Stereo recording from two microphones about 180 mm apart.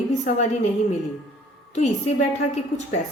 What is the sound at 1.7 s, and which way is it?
Speech, 40° left (ahead or behind).